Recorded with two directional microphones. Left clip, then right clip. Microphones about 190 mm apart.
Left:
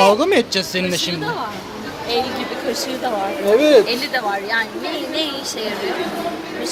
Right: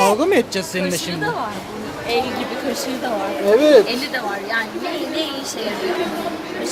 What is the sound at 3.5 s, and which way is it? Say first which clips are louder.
Speech: even; centre (ahead or behind).